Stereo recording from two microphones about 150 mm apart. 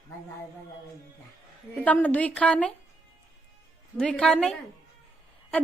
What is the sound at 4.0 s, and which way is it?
Speech, 5° left (ahead or behind).